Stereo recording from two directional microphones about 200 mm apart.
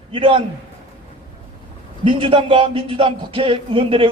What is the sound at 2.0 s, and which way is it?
A man's voice, 25° right (ahead or behind).